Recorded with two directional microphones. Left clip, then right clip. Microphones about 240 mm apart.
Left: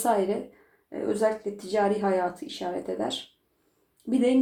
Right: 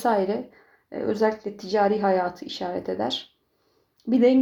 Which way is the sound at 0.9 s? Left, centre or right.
Right.